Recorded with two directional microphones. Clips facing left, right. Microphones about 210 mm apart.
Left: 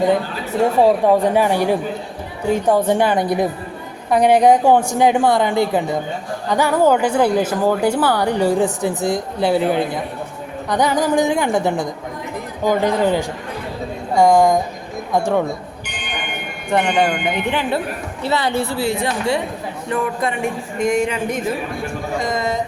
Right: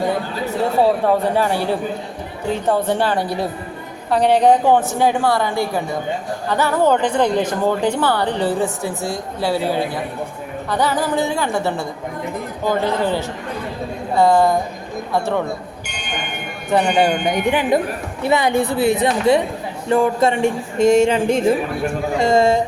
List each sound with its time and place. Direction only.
1.0 s speech: 15° left (ahead or behind)
16.6 s speech: 5° right (ahead or behind); by 22.6 s 30° right (ahead or behind)